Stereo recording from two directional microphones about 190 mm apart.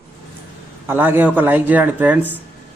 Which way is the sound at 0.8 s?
10° right (ahead or behind).